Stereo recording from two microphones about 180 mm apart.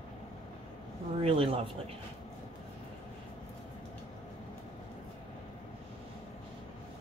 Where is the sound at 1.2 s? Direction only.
30° right (ahead or behind).